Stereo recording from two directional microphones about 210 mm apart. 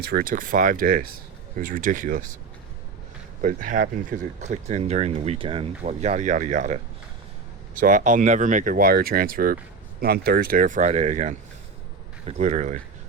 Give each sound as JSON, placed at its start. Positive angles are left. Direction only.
{"t": 0.0, "sound": "speech", "side_deg": -45}
{"t": 3.4, "sound": "speech", "side_deg": -40}
{"t": 7.8, "sound": "speech", "side_deg": -35}